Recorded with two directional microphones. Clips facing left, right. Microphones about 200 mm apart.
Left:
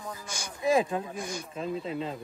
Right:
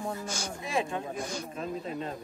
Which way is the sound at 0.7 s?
35° left (ahead or behind).